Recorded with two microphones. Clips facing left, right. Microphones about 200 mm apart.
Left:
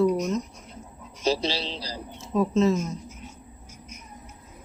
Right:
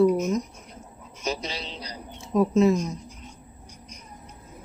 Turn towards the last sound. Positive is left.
turn(degrees=5)  # may be behind; listen again after turning